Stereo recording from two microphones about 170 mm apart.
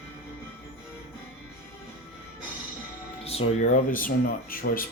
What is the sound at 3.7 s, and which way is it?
Speech, 55° left (ahead or behind).